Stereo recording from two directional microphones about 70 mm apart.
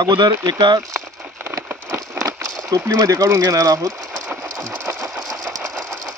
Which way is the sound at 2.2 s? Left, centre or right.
Right.